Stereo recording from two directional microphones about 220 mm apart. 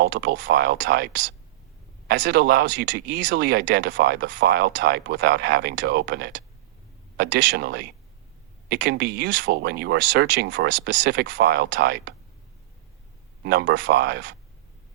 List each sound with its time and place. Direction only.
0.0 s speech: 45° right (ahead or behind)
11.0 s speech: 50° right (ahead or behind)
13.4 s speech: 50° right (ahead or behind)